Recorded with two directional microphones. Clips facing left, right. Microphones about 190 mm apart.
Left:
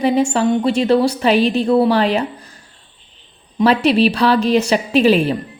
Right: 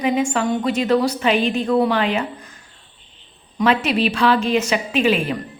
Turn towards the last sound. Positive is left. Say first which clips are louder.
# left 5 dB
turn(degrees=35)  # may be behind; listen again after turning